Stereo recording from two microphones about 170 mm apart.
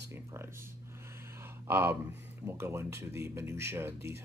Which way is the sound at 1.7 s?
15° right (ahead or behind).